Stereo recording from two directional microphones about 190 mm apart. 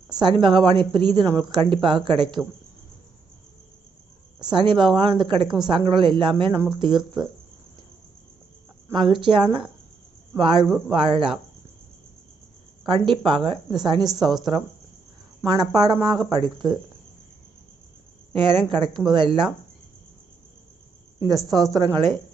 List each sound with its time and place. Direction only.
0.2 s speech: 25° right (ahead or behind)
4.4 s speech: 25° right (ahead or behind)
6.5 s speech: 15° right (ahead or behind)
6.7 s speech: 25° right (ahead or behind)
8.9 s speech: 25° right (ahead or behind)
12.9 s speech: 25° right (ahead or behind)
15.7 s speech: 20° right (ahead or behind)
18.3 s speech: 25° right (ahead or behind)
21.2 s speech: 20° right (ahead or behind)